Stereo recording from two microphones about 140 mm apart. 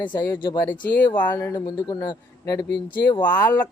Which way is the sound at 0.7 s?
15° left (ahead or behind).